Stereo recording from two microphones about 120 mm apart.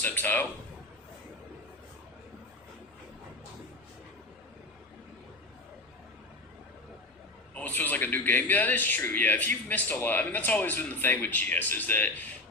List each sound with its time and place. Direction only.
0.0 s a man's voice: 15° left (ahead or behind)
7.5 s a man's voice: 15° left (ahead or behind)